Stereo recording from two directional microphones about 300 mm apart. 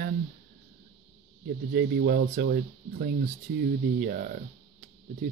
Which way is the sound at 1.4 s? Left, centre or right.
Right.